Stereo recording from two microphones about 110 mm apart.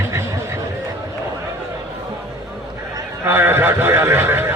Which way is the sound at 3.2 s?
20° right (ahead or behind).